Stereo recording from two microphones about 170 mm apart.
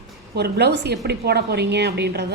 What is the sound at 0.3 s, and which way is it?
A woman's voice, 75° right (ahead or behind).